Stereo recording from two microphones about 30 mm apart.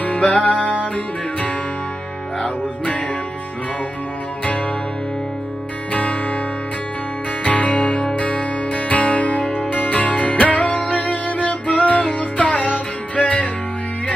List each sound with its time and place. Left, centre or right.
0.0 s music: left
7.4 s music: left